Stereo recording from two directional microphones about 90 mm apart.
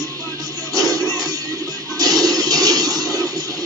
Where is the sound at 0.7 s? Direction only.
45° right (ahead or behind).